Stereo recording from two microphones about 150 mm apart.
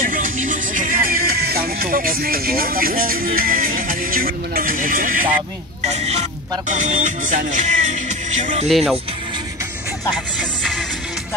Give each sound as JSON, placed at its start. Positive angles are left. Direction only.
{"t": 0.0, "sound": "music", "side_deg": -65}
{"t": 5.9, "sound": "speech", "side_deg": -45}
{"t": 6.7, "sound": "music", "side_deg": -55}
{"t": 8.6, "sound": "speech", "side_deg": 0}